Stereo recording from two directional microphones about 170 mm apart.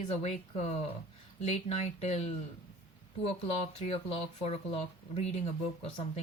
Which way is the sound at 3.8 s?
35° left (ahead or behind).